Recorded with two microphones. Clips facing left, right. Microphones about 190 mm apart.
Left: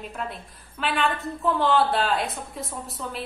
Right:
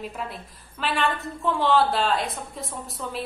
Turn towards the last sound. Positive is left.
turn(degrees=0)  # may be behind; listen again after turning